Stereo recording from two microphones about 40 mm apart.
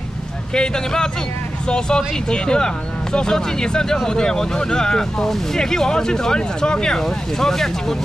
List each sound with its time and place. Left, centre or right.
0.6 s speech: centre